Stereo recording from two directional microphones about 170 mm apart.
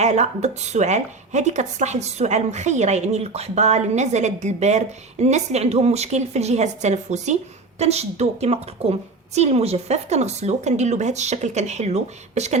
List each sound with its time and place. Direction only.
0.0 s a woman's voice: 40° right (ahead or behind)